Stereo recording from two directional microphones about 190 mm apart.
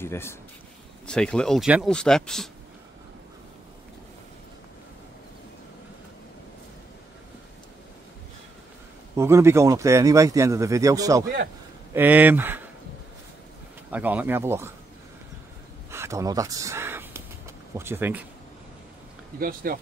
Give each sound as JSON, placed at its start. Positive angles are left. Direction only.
{"t": 0.0, "sound": "speech", "side_deg": 15}
{"t": 9.1, "sound": "a man's voice", "side_deg": -15}
{"t": 13.8, "sound": "a man's voice", "side_deg": -10}
{"t": 15.9, "sound": "a sound", "side_deg": -15}
{"t": 17.7, "sound": "a man's voice", "side_deg": -10}
{"t": 19.4, "sound": "speech", "side_deg": -50}